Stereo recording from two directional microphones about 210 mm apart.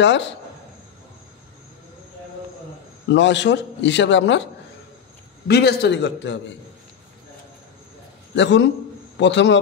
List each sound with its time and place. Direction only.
0.0 s a man's voice: 60° left (ahead or behind)
3.1 s a man's voice: 60° left (ahead or behind)
5.5 s a man's voice: 50° left (ahead or behind)
8.4 s a man's voice: 60° left (ahead or behind)